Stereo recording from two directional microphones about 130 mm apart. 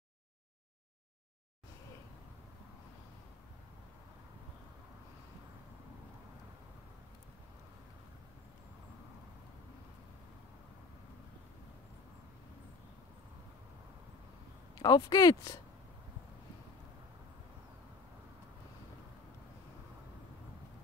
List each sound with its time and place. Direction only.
14.8 s speech: 30° left (ahead or behind)